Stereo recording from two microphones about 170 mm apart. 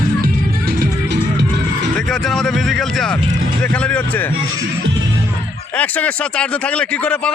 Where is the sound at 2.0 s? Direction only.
5° left (ahead or behind).